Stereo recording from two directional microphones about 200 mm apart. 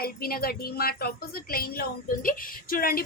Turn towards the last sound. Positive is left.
turn(degrees=45)  # may be behind; listen again after turning